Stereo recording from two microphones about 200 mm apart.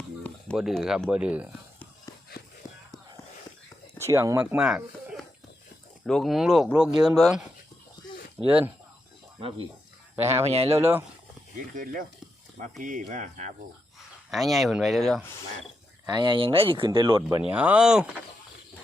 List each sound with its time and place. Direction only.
0.2 s speech: centre (ahead or behind)
2.6 s a sound: 15° left (ahead or behind)
3.9 s speech: 15° right (ahead or behind)
10.4 s speech: 30° right (ahead or behind)
11.7 s speech: 45° right (ahead or behind)
14.3 s speech: centre (ahead or behind)
16.0 s speech: 20° right (ahead or behind)
17.4 s speech: 5° right (ahead or behind)